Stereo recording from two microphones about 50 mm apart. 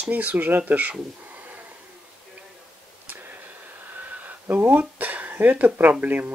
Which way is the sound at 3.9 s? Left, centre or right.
Right.